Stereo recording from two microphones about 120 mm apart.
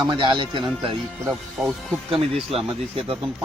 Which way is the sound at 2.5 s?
50° right (ahead or behind).